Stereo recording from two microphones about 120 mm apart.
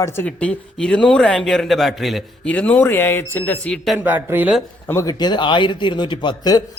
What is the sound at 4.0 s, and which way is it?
Speech, 15° right (ahead or behind).